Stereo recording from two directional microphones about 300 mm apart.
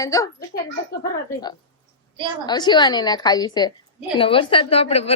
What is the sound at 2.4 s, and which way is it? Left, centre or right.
Speech, centre.